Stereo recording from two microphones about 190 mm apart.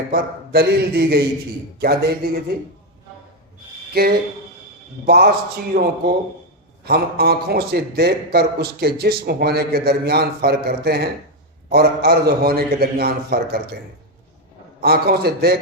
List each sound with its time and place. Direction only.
0.1 s a man's voice: 55° right (ahead or behind)
3.9 s a man's voice: 55° right (ahead or behind)
14.8 s a man's voice: 55° right (ahead or behind)